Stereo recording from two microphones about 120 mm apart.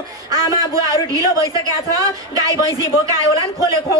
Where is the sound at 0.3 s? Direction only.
30° right (ahead or behind).